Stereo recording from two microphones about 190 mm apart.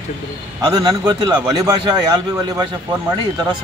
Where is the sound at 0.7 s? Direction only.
20° right (ahead or behind).